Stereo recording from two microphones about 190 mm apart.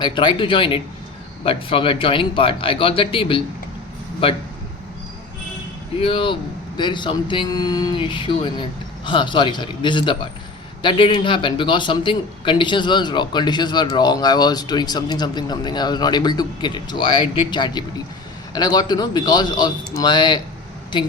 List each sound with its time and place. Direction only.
0.0 s speech: 25° left (ahead or behind)
6.0 s speech: 25° left (ahead or behind)